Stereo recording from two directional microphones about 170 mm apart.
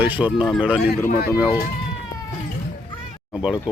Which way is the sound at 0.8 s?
60° left (ahead or behind).